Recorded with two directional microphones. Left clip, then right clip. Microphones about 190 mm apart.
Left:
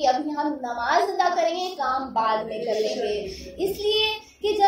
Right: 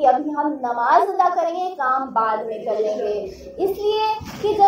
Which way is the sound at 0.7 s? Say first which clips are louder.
Right 6 dB; 20° right (ahead or behind).